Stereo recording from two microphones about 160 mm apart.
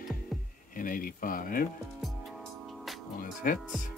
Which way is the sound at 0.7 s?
60° left (ahead or behind).